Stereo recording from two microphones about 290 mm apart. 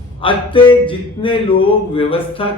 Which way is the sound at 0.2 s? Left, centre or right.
Centre.